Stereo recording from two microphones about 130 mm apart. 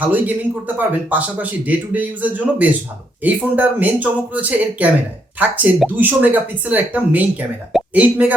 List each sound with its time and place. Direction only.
0.0 s speech: 15° right (ahead or behind)